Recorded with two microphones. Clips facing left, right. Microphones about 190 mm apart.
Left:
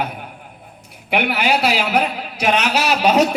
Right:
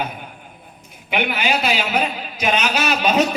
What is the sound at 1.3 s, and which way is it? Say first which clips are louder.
A man's voice: left 4 dB; 70° left (ahead or behind).